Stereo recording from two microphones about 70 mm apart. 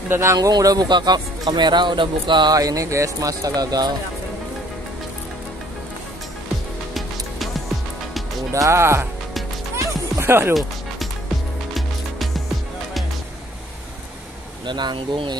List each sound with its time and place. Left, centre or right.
0.1 s speech: right
0.4 s speech: right
8.5 s speech: right
10.2 s speech: right
14.7 s speech: right